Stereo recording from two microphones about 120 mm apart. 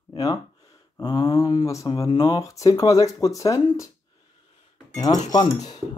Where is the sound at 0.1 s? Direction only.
30° left (ahead or behind).